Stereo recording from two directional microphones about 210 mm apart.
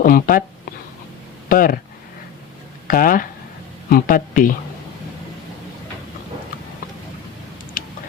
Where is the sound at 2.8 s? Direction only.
40° left (ahead or behind).